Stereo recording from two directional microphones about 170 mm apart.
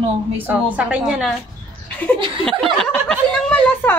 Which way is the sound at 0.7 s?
5° right (ahead or behind).